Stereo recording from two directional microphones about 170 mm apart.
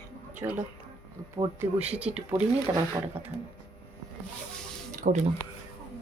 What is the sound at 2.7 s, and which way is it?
Speech, 20° right (ahead or behind).